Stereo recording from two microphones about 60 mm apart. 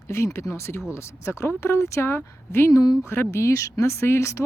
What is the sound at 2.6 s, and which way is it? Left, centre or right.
Speech, left.